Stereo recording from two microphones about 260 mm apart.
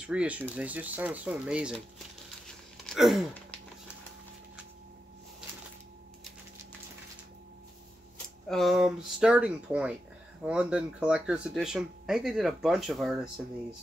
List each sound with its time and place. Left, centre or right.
0.0 s speech: centre
2.9 s a sound: centre
8.5 s speech: centre